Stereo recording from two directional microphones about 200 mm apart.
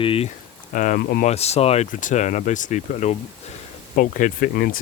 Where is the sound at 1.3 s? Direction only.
30° left (ahead or behind).